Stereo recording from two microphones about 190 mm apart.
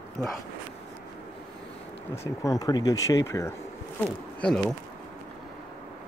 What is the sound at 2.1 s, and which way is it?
Speech, 15° left (ahead or behind).